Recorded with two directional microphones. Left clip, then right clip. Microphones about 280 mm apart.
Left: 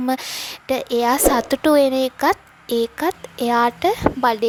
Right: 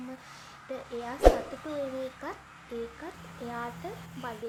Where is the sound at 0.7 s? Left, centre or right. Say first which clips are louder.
Left 19 dB; left.